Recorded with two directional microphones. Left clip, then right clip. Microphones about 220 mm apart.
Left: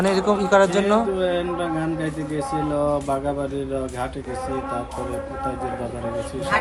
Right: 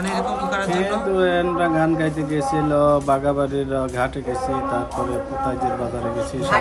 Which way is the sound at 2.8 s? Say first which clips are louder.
Right 6 dB; 40° right (ahead or behind).